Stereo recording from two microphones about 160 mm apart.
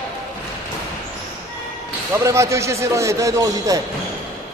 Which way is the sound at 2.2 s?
20° right (ahead or behind).